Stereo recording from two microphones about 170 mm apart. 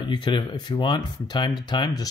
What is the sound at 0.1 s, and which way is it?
Speech, 30° left (ahead or behind).